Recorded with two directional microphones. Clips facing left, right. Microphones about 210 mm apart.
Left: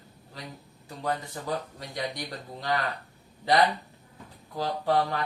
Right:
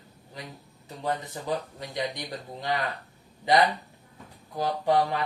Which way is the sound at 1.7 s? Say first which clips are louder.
Right 2 dB; 20° right (ahead or behind).